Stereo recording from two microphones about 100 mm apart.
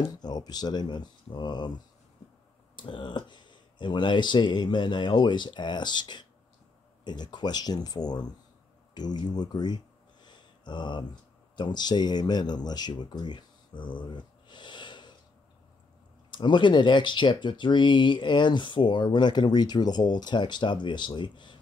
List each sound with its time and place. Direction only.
0.1 s speech: 45° left (ahead or behind)
2.7 s speech: 55° left (ahead or behind)
10.2 s a sound: 50° left (ahead or behind)
11.5 s speech: 50° left (ahead or behind)
14.0 s a sound: 50° left (ahead or behind)
16.3 s speech: 50° left (ahead or behind)